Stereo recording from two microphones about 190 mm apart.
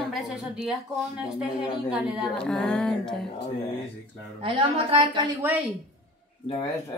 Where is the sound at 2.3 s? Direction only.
5° left (ahead or behind).